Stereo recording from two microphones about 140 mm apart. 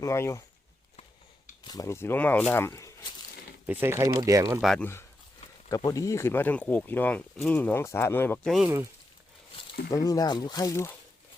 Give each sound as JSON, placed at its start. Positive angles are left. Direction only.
{"t": 0.0, "sound": "speech", "side_deg": 20}
{"t": 1.6, "sound": "speech", "side_deg": 25}
{"t": 3.7, "sound": "speech", "side_deg": -15}
{"t": 4.6, "sound": "speech", "side_deg": 5}
{"t": 5.6, "sound": "speech", "side_deg": 25}
{"t": 8.4, "sound": "speech", "side_deg": 0}
{"t": 10.1, "sound": "speech", "side_deg": 30}